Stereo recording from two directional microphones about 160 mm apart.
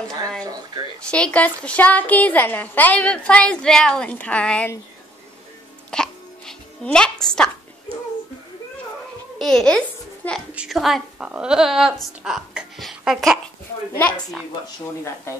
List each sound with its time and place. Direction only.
0.4 s speech: 25° right (ahead or behind)
1.0 s a woman's voice: 5° left (ahead or behind)
5.9 s music: 5° left (ahead or behind)
9.4 s a child's voice: 5° left (ahead or behind)
10.5 s a woman's voice: 5° right (ahead or behind)